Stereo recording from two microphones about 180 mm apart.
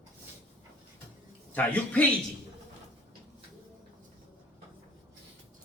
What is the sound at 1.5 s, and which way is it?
Speech, 10° left (ahead or behind).